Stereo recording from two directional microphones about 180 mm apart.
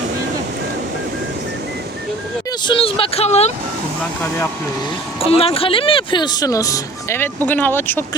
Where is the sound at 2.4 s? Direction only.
25° left (ahead or behind).